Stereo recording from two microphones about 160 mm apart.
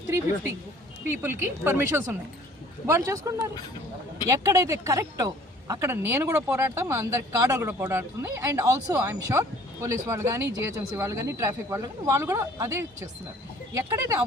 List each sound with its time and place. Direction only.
1.0 s a woman's voice: 15° right (ahead or behind)